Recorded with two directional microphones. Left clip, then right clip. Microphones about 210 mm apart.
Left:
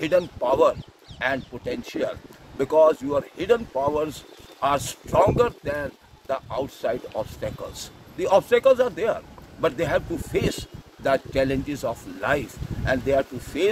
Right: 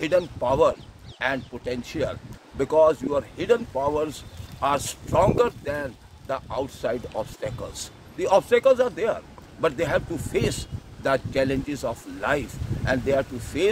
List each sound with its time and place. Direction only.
0.4 s speech: 5° right (ahead or behind)